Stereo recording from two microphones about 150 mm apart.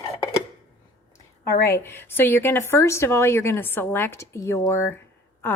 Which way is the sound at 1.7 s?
15° left (ahead or behind).